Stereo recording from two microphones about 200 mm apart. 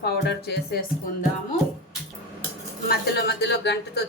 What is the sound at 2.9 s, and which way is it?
Speech, 55° left (ahead or behind).